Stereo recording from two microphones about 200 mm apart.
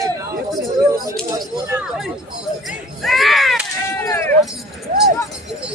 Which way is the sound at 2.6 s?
Centre (ahead or behind).